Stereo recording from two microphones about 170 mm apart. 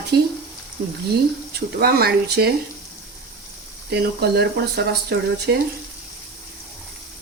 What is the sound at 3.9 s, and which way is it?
A woman's voice, 70° right (ahead or behind).